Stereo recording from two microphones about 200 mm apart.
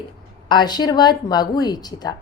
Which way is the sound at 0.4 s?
20° left (ahead or behind).